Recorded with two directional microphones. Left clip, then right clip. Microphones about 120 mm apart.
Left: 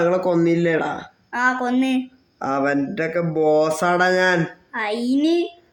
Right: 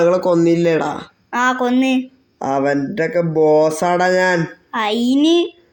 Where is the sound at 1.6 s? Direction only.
20° right (ahead or behind).